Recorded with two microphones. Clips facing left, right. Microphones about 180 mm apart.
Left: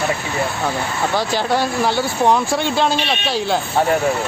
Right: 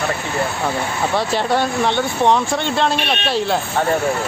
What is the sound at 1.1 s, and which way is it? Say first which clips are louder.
Speech: right 1 dB; centre (ahead or behind).